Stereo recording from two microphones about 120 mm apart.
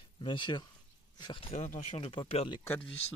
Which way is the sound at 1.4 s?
60° left (ahead or behind).